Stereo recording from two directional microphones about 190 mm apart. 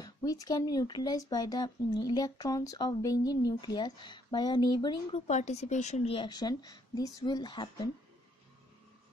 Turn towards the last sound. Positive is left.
turn(degrees=25)  # may be behind; listen again after turning